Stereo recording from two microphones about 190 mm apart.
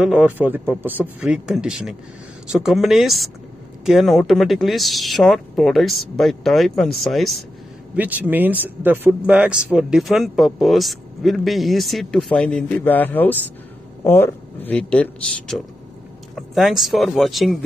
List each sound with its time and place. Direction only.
0.0 s speech: 5° right (ahead or behind)